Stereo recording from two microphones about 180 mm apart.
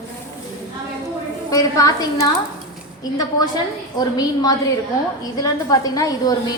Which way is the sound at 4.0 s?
20° left (ahead or behind).